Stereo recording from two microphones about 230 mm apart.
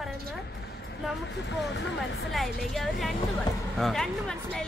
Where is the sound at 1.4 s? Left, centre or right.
Left.